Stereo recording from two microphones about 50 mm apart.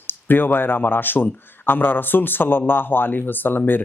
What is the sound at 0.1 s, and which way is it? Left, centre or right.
Speech, left.